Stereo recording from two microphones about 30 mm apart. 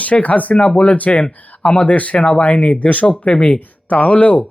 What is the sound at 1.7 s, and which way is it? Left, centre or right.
Speech, left.